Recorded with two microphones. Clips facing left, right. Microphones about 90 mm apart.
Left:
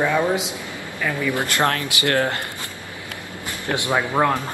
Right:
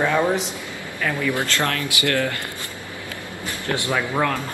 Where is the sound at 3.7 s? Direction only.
20° left (ahead or behind).